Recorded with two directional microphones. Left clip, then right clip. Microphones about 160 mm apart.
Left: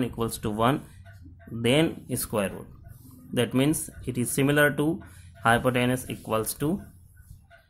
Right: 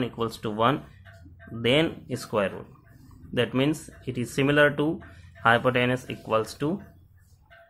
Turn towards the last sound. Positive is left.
turn(degrees=25)  # may be behind; listen again after turning